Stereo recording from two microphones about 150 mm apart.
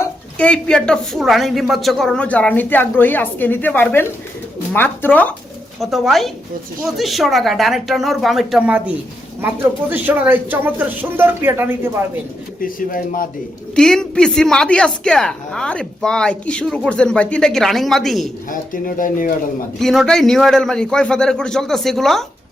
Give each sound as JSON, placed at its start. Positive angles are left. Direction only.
{"t": 0.3, "sound": "a woman's voice", "side_deg": 5}
{"t": 5.8, "sound": "a woman's voice", "side_deg": 0}
{"t": 12.6, "sound": "speech", "side_deg": 65}
{"t": 13.7, "sound": "a woman's voice", "side_deg": 5}
{"t": 18.5, "sound": "speech", "side_deg": 65}
{"t": 19.8, "sound": "a woman's voice", "side_deg": 0}